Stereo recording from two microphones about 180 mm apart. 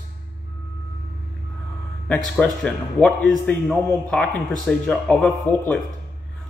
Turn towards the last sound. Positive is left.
turn(degrees=5)  # may be behind; listen again after turning